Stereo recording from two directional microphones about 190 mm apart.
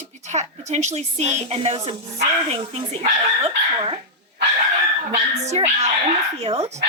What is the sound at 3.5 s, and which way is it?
Speech, 30° right (ahead or behind).